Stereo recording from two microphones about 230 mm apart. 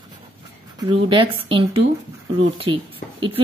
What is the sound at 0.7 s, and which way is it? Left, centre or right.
Speech, right.